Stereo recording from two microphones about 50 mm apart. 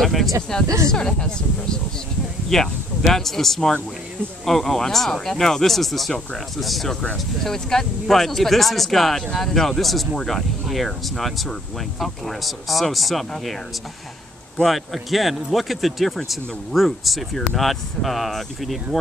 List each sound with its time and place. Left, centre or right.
0.0 s speech: centre
14.6 s speech: centre